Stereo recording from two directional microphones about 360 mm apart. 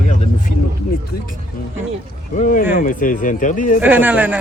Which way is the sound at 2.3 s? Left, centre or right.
Left.